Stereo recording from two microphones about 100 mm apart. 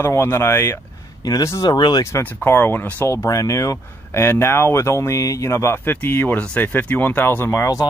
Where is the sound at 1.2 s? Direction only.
35° left (ahead or behind).